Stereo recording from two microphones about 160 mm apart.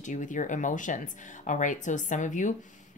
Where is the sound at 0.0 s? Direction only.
50° left (ahead or behind).